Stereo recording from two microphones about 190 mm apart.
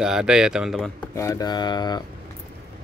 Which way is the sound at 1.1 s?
15° left (ahead or behind).